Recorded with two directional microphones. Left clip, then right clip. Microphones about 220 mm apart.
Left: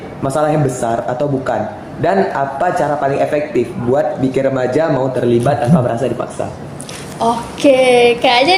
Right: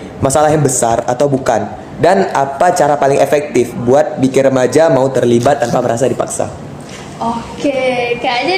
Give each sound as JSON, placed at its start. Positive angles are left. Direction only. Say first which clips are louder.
{"t": 0.2, "sound": "a man's voice", "louder": "right 4 dB", "side_deg": -40}
{"t": 7.2, "sound": "a woman's voice", "louder": "left 4 dB", "side_deg": 50}